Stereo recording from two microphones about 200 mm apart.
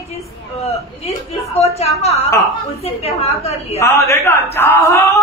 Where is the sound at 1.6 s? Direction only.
30° left (ahead or behind).